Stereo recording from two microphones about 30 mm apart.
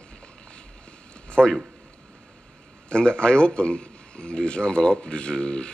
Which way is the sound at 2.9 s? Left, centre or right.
Left.